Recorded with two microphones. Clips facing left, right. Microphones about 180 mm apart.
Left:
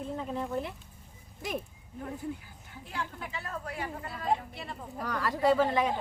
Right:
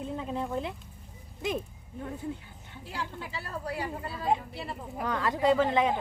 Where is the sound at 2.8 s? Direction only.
35° right (ahead or behind).